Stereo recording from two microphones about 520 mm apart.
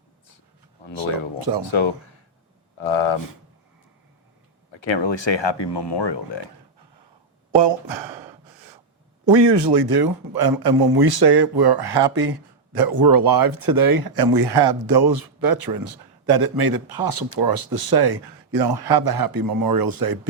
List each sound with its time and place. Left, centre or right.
1.4 s a man's voice: right
2.8 s speech: left
4.7 s speech: left
7.5 s speech: right
8.1 s gasp: centre
9.3 s a man's voice: right